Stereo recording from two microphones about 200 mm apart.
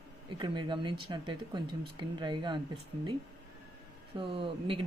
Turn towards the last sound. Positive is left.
turn(degrees=-25)  # may be behind; listen again after turning